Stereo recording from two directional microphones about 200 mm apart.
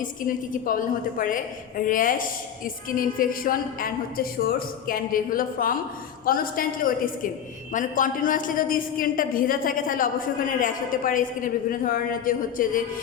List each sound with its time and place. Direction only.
0.0 s a woman's voice: 40° left (ahead or behind)